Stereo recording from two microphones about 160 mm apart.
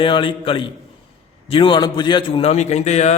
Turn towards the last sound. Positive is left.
turn(degrees=45)  # may be behind; listen again after turning